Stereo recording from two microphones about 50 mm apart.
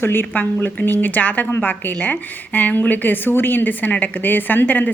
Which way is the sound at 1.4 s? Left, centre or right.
Left.